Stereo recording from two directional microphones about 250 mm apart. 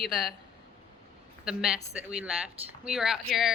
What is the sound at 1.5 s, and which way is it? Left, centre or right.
A woman's voice, centre.